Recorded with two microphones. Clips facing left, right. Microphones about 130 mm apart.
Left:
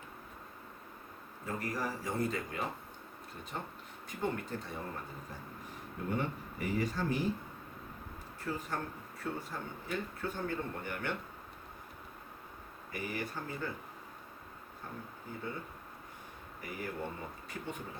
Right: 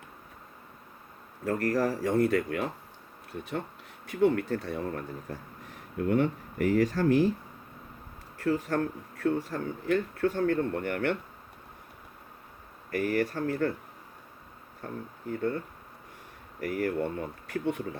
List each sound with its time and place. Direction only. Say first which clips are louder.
1.5 s speech: right 10 dB; 75° right (ahead or behind)
4.0 s speech: right 12 dB; 80° right
6.1 s speech: right 10 dB; 85° right
8.4 s speech: right 11 dB; 80° right
12.9 s speech: right 11 dB; 80° right
15.3 s speech: right 12 dB; 65° right (ahead or behind)